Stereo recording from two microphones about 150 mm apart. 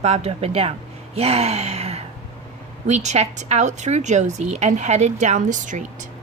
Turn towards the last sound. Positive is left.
turn(degrees=-55)  # may be behind; listen again after turning